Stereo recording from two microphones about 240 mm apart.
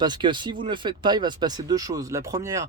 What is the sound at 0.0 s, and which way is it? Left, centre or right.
Speech, centre.